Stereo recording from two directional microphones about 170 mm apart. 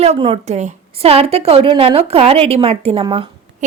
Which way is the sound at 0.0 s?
35° right (ahead or behind).